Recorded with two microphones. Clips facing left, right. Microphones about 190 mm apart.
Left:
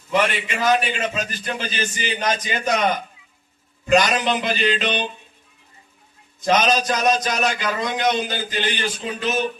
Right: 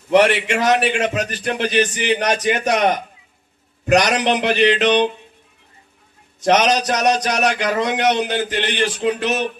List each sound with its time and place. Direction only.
0.1 s a man's voice: 75° right (ahead or behind)
6.4 s a man's voice: 75° right (ahead or behind)